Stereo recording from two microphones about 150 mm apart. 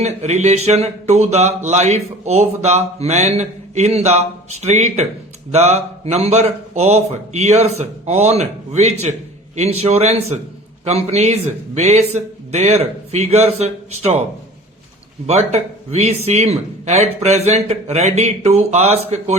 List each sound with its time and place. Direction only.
0.0 s speech: 50° right (ahead or behind)
15.3 s speech: 45° right (ahead or behind)